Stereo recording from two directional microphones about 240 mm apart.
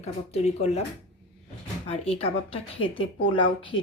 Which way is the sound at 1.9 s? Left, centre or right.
Left.